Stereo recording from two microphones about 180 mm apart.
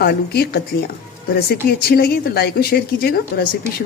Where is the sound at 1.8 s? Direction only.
60° left (ahead or behind).